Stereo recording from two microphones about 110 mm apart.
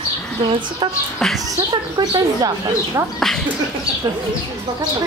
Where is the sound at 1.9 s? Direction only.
35° right (ahead or behind).